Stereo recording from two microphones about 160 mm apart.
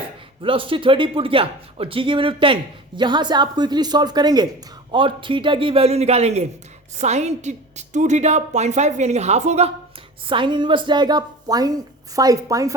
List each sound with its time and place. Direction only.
0.4 s a woman's voice: 35° right (ahead or behind)
10.2 s a woman's voice: 30° right (ahead or behind)